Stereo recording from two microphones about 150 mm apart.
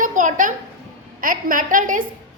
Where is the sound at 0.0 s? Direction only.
60° right (ahead or behind).